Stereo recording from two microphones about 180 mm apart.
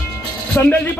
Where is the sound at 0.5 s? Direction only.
10° left (ahead or behind).